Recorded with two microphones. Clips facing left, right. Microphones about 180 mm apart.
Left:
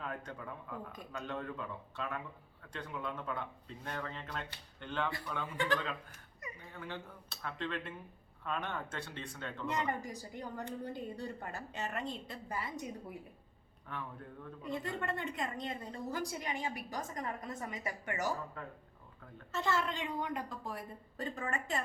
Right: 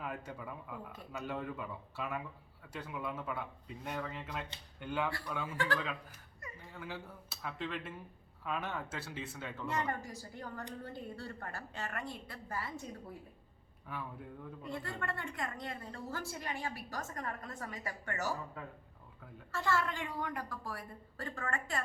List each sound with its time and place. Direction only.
0.0 s speech: 5° right (ahead or behind)
5.5 s a woman's voice: 20° left (ahead or behind)
6.7 s speech: 5° right (ahead or behind)
9.6 s a woman's voice: 15° left (ahead or behind)
13.8 s speech: 10° right (ahead or behind)
14.6 s a woman's voice: 20° left (ahead or behind)
18.6 s speech: 5° right (ahead or behind)
19.5 s a woman's voice: 20° left (ahead or behind)